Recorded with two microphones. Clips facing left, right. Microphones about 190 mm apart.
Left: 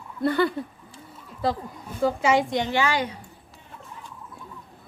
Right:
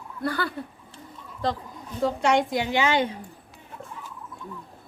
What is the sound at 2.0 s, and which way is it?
Speech, 5° left (ahead or behind).